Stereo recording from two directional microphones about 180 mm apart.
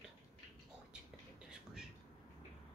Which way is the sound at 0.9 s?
5° right (ahead or behind).